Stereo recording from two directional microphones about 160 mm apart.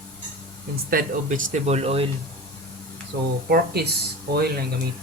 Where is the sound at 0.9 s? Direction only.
60° right (ahead or behind); by 2.1 s 40° right (ahead or behind).